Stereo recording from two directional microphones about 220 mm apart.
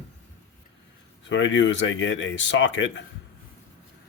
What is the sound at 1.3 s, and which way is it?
Speech, 55° left (ahead or behind).